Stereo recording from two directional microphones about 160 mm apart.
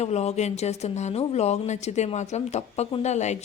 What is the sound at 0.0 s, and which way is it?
A woman's voice, 45° left (ahead or behind).